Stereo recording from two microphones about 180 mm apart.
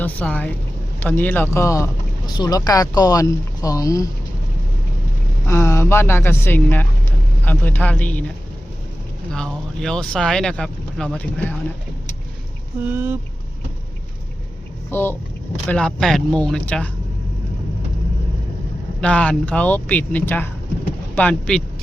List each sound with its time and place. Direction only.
0.0 s speech: 10° left (ahead or behind)
5.5 s speech: 15° left (ahead or behind)
9.3 s speech: 5° left (ahead or behind)
12.8 s a sound: 10° right (ahead or behind)
14.8 s speech: 10° left (ahead or behind)
18.9 s speech: 5° left (ahead or behind)